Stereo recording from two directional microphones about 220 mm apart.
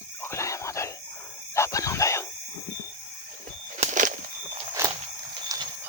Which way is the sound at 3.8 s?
35° right (ahead or behind).